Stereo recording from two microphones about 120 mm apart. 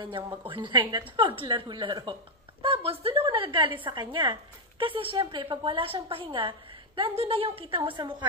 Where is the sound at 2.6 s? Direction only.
50° right (ahead or behind).